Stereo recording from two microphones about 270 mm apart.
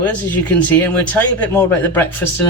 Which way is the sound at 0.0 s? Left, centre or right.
Centre.